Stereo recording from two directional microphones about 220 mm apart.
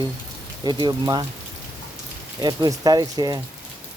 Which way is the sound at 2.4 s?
20° right (ahead or behind).